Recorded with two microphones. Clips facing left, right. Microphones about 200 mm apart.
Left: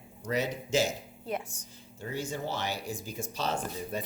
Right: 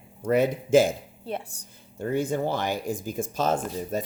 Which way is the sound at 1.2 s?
30° right (ahead or behind).